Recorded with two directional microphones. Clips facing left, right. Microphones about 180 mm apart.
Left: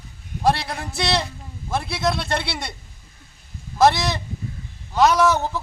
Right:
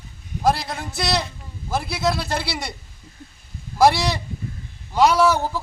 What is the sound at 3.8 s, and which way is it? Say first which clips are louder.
A man's voice: right 1 dB; 10° right (ahead or behind).